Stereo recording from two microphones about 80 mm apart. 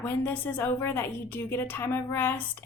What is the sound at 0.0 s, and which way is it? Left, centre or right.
A woman's voice, left.